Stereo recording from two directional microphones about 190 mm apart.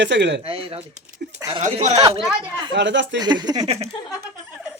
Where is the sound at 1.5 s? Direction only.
35° right (ahead or behind).